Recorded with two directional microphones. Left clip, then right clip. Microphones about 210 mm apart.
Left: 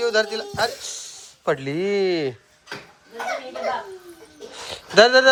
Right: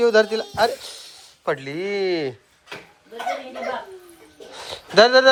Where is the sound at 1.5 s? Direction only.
20° left (ahead or behind).